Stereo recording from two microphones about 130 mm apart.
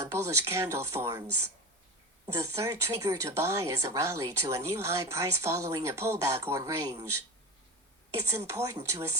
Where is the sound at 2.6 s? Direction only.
25° right (ahead or behind).